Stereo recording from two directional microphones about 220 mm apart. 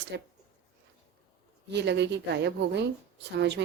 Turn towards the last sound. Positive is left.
turn(degrees=-50)  # may be behind; listen again after turning